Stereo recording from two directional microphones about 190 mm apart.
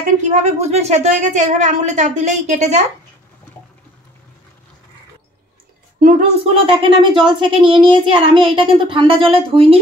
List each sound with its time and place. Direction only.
0.0 s a woman's voice: 40° right (ahead or behind)
5.9 s a woman's voice: 40° right (ahead or behind)
6.6 s a child's voice: 30° right (ahead or behind)